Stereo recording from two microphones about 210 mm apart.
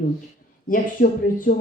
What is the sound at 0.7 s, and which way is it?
Speech, 40° left (ahead or behind).